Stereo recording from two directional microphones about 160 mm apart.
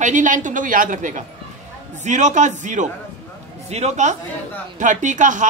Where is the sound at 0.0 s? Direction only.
50° right (ahead or behind).